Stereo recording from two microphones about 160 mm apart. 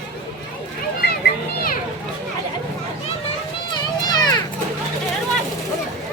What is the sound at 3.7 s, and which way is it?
Children playing, 25° left (ahead or behind).